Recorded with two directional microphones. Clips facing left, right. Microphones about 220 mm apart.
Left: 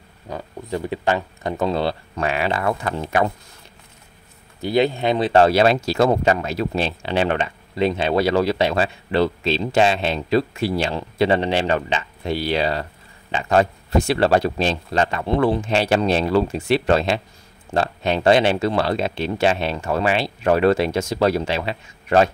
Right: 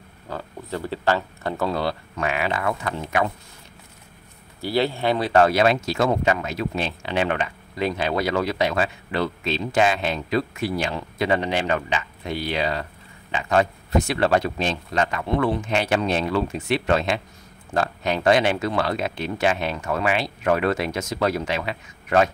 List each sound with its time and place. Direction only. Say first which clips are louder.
0.3 s speech: left 3 dB; 15° left (ahead or behind); by 3.3 s 35° left (ahead or behind)
4.6 s speech: left 4 dB; 20° left (ahead or behind)